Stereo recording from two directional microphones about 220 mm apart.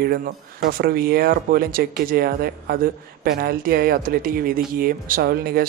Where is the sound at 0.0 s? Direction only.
45° right (ahead or behind).